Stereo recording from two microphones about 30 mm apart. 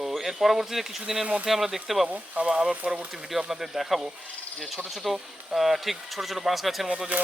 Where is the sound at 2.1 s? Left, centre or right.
Right.